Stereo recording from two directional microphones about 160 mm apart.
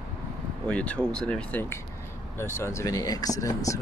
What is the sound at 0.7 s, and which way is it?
Speech, 10° left (ahead or behind).